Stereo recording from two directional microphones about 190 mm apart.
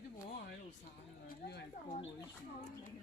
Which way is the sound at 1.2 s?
55° left (ahead or behind).